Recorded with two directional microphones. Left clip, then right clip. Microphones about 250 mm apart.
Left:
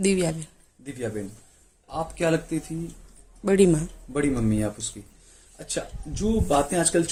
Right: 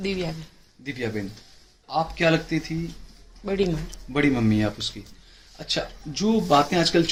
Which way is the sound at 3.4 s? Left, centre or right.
Left.